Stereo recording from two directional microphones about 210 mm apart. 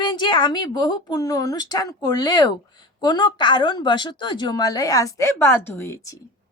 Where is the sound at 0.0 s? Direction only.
20° left (ahead or behind).